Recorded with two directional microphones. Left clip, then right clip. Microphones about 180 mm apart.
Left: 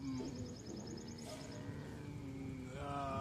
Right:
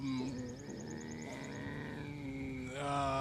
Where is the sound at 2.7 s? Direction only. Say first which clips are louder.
Right 7 dB; 25° right (ahead or behind).